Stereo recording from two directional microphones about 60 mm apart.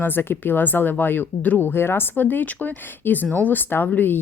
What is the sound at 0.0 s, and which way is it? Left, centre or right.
A woman's voice, left.